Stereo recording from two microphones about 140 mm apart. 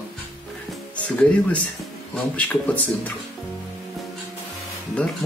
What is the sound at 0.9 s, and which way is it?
Speech, 10° left (ahead or behind).